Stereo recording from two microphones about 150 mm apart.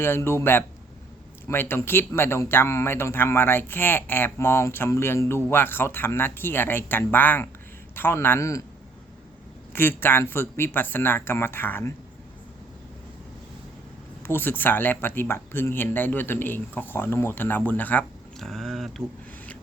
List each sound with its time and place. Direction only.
0.0 s speech: 15° left (ahead or behind)
9.7 s speech: 15° left (ahead or behind)
14.2 s speech: 15° left (ahead or behind)